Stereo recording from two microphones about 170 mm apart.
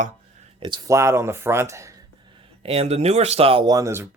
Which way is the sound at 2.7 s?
35° right (ahead or behind).